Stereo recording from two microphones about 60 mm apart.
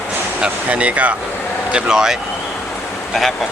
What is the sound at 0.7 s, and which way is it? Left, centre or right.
Speech, right.